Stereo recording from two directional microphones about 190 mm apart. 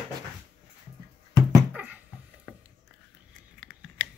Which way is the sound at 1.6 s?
10° right (ahead or behind).